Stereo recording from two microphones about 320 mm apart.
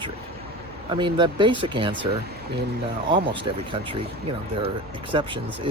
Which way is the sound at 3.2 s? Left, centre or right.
Centre.